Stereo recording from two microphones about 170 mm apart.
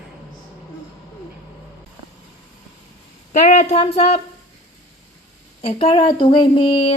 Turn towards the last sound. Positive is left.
turn(degrees=30)  # may be behind; listen again after turning